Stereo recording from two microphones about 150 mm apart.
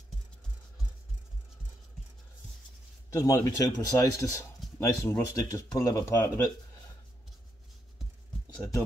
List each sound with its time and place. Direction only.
3.1 s speech: 25° left (ahead or behind)